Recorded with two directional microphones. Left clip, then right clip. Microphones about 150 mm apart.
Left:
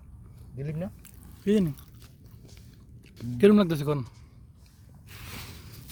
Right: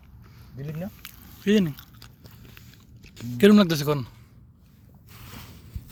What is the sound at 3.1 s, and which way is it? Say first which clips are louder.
Speech: right 2 dB; 5° right (ahead or behind).